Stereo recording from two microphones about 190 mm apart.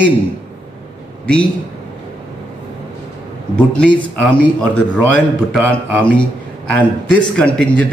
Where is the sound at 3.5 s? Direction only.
5° left (ahead or behind).